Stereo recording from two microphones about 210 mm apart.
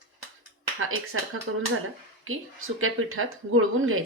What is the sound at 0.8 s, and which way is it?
Speech, 80° right.